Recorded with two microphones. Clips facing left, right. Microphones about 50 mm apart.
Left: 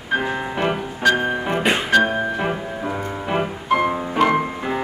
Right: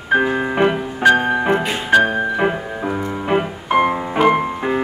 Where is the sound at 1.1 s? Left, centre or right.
Right.